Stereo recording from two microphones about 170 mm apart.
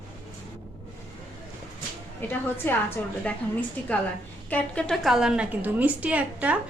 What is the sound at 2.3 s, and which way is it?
Speech, 10° left (ahead or behind).